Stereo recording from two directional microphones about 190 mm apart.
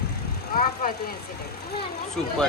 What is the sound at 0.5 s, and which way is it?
Speech, 50° left (ahead or behind).